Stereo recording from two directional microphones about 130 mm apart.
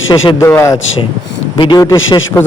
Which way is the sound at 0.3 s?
20° left (ahead or behind).